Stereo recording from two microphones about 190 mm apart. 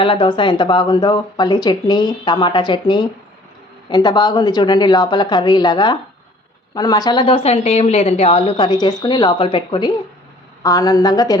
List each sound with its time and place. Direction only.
0.0 s a woman's voice: 25° left (ahead or behind)